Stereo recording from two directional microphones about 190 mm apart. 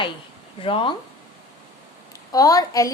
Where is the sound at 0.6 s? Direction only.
30° left (ahead or behind).